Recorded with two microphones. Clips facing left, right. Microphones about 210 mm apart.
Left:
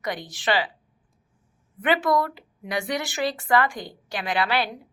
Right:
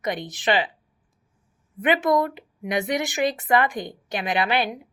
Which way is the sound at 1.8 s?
20° right (ahead or behind).